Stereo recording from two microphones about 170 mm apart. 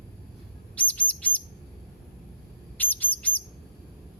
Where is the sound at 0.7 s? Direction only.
10° left (ahead or behind).